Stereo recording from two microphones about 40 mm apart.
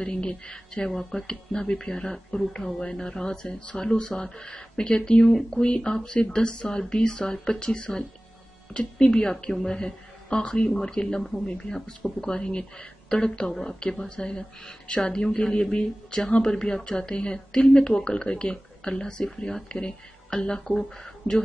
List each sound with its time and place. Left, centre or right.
0.0 s speech: left
0.8 s a woman's voice: centre; by 15.2 s left
15.3 s speech: centre